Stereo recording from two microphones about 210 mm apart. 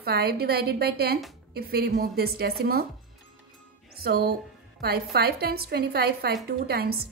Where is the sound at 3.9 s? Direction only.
45° right (ahead or behind).